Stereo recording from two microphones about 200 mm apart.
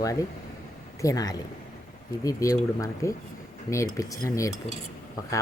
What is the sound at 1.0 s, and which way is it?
Speech, 20° left (ahead or behind).